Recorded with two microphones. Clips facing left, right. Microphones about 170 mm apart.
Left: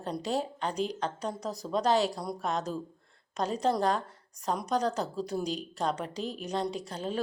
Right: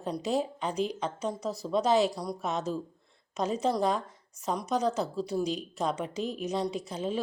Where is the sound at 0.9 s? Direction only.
5° right (ahead or behind).